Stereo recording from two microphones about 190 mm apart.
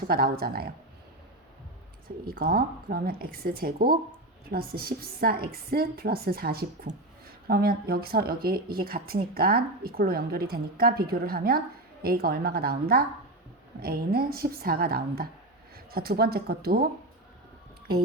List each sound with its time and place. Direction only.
0.1 s speech: 50° right (ahead or behind)
2.0 s speech: 50° right (ahead or behind)